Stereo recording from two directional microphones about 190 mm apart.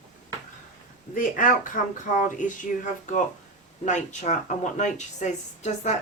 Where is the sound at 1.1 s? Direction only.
45° left (ahead or behind).